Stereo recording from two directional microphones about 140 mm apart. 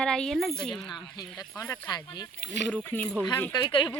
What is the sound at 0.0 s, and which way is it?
Speech, 5° left (ahead or behind).